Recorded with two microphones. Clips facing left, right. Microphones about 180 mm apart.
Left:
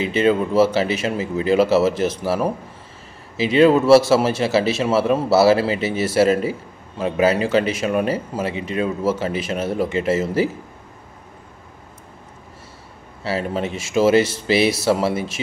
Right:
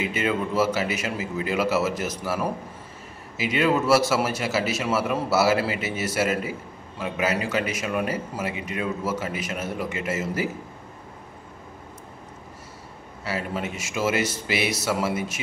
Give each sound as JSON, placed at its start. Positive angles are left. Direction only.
{"t": 0.0, "sound": "speech", "side_deg": 30}
{"t": 13.2, "sound": "speech", "side_deg": 30}